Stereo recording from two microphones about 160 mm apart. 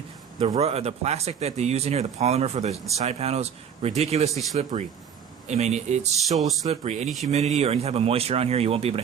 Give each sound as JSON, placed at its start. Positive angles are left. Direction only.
{"t": 0.3, "sound": "speech", "side_deg": -40}